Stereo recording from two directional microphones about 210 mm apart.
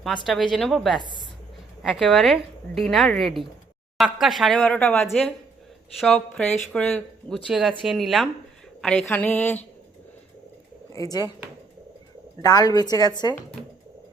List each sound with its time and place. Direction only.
0.5 s a woman's voice: centre (ahead or behind)
10.9 s speech: 15° left (ahead or behind)
12.4 s a woman's voice: 15° left (ahead or behind)